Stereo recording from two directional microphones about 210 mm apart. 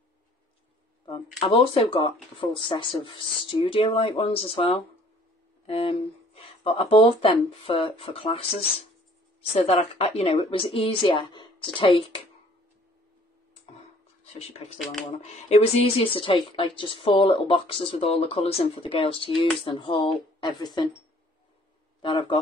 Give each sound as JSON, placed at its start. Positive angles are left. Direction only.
{"t": 1.5, "sound": "speech", "side_deg": 25}
{"t": 15.2, "sound": "speech", "side_deg": 30}
{"t": 22.0, "sound": "speech", "side_deg": 25}